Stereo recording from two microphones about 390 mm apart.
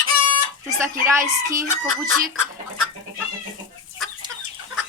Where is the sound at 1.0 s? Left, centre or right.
Centre.